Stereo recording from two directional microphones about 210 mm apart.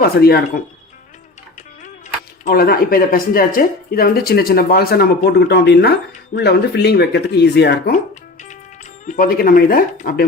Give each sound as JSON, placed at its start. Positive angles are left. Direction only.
{"t": 0.0, "sound": "speech", "side_deg": 50}
{"t": 2.4, "sound": "speech", "side_deg": 45}
{"t": 9.0, "sound": "speech", "side_deg": 40}